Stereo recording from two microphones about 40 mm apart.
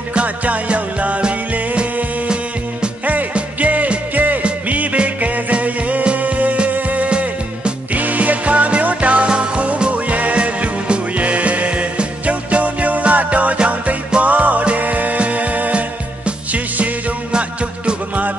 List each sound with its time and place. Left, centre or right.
0.1 s music: right
3.5 s music: right
7.1 s music: right
7.9 s music: right
17.3 s music: right